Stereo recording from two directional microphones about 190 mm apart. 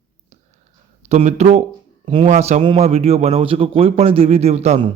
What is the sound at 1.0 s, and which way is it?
A man's voice, 35° right (ahead or behind).